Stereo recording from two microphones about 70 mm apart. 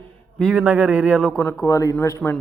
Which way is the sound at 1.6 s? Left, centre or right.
Left.